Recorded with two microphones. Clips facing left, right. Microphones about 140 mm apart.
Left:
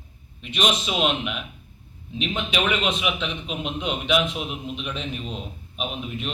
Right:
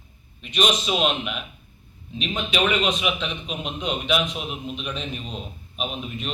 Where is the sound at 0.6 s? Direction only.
15° left (ahead or behind).